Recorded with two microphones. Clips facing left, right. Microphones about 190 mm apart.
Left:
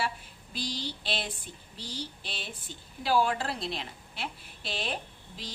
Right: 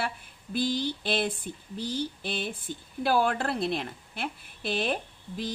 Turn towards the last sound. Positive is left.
turn(degrees=-55)  # may be behind; listen again after turning